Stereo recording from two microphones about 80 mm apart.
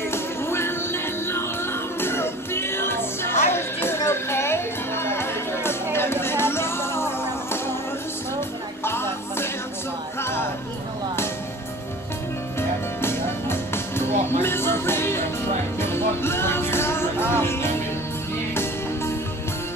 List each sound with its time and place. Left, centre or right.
0.1 s music: left
12.5 s music: left